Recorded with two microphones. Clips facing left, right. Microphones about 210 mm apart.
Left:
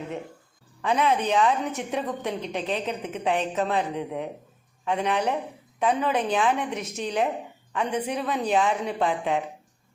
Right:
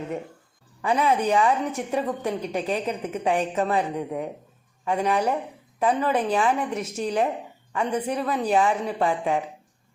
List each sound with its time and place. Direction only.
0.8 s a woman's voice: 5° right (ahead or behind)